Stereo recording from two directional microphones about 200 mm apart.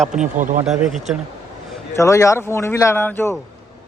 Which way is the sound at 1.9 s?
15° left (ahead or behind).